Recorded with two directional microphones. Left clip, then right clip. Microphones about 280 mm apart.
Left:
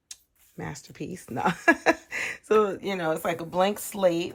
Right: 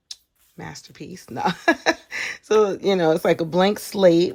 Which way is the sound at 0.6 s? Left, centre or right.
Centre.